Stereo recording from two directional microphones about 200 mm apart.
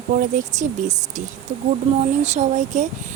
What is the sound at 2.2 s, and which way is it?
Speech, 35° right (ahead or behind).